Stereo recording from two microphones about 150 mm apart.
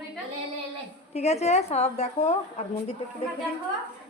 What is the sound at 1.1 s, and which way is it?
A woman's voice, 45° left (ahead or behind).